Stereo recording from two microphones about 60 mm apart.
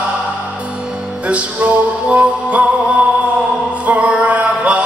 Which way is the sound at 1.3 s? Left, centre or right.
Right.